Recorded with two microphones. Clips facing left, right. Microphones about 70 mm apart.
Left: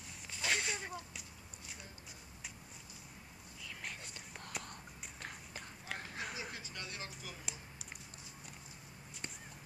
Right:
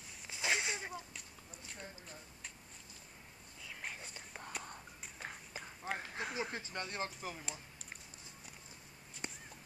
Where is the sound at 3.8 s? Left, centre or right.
Centre.